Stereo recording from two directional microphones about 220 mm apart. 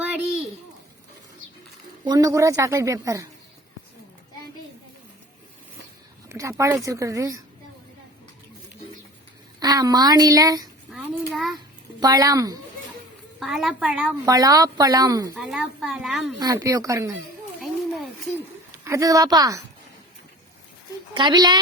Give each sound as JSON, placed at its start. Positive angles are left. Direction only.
{"t": 0.0, "sound": "a sound", "side_deg": -5}
{"t": 2.0, "sound": "a woman's voice", "side_deg": -15}
{"t": 6.2, "sound": "a woman's voice", "side_deg": -15}
{"t": 9.6, "sound": "a woman's voice", "side_deg": -15}
{"t": 10.9, "sound": "a sound", "side_deg": -10}
{"t": 11.3, "sound": "a woman's voice", "side_deg": 0}
{"t": 11.9, "sound": "a woman's voice", "side_deg": -15}
{"t": 13.4, "sound": "a woman's voice", "side_deg": 0}
{"t": 14.3, "sound": "a woman's voice", "side_deg": -15}
{"t": 15.4, "sound": "a woman's voice", "side_deg": 0}
{"t": 16.4, "sound": "a woman's voice", "side_deg": -15}
{"t": 17.6, "sound": "a sound", "side_deg": 0}
{"t": 18.9, "sound": "a woman's voice", "side_deg": -15}
{"t": 21.1, "sound": "speech", "side_deg": -20}